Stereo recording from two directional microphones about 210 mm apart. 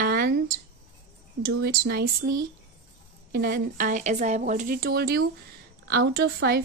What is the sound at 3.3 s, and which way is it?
A woman's voice, 45° right (ahead or behind).